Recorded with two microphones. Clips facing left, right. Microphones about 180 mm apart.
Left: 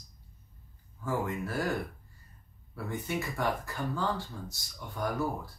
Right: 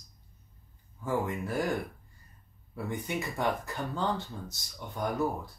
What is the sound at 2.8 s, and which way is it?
Speech, 20° right (ahead or behind).